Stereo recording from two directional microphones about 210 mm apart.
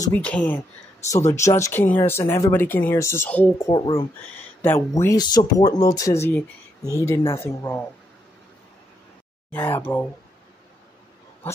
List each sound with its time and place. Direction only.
0.1 s speech: 5° left (ahead or behind)
3.7 s speech: 20° left (ahead or behind)
4.6 s speech: 10° left (ahead or behind)
9.5 s speech: 10° left (ahead or behind)